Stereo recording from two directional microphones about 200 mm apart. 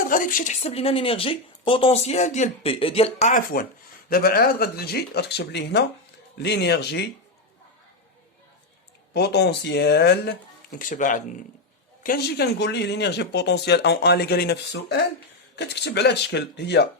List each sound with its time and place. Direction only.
0.1 s speech: 40° left (ahead or behind)
9.1 s speech: 55° left (ahead or behind)
10.8 s speech: 40° left (ahead or behind)
12.0 s speech: 50° left (ahead or behind)